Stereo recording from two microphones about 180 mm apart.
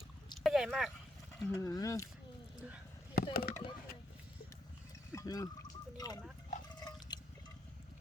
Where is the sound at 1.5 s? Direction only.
20° left (ahead or behind).